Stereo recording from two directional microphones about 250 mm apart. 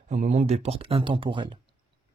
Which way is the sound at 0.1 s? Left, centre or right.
Right.